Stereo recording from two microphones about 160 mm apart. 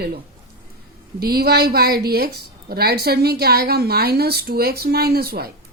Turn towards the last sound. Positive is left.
turn(degrees=-75)  # may be behind; listen again after turning